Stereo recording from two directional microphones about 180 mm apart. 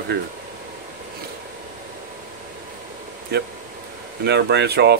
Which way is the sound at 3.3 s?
65° right (ahead or behind).